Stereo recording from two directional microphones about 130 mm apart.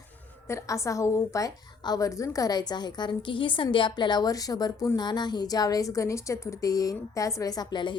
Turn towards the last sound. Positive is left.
turn(degrees=35)  # may be behind; listen again after turning